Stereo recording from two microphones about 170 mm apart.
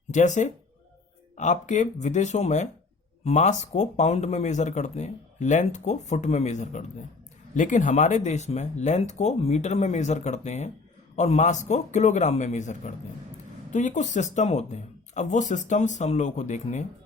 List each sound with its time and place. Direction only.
0.1 s speech: 45° left (ahead or behind)